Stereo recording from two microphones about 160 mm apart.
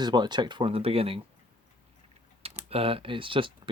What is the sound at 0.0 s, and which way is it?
Speech, 25° right (ahead or behind).